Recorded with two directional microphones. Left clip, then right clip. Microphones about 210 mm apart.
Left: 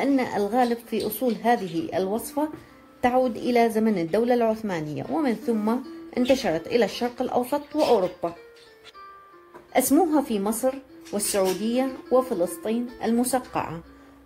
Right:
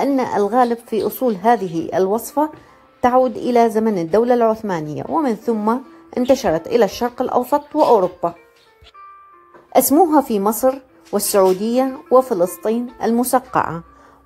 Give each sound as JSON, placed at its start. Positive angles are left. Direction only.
{"t": 0.0, "sound": "a woman's voice", "side_deg": -10}
{"t": 9.7, "sound": "a woman's voice", "side_deg": -15}